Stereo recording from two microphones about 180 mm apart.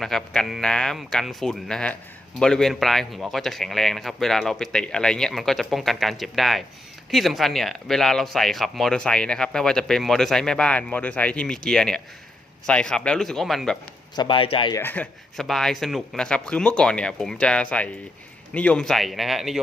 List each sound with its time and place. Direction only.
0.0 s speech: centre (ahead or behind)
14.2 s speech: 30° left (ahead or behind)
14.8 s speech: 10° left (ahead or behind)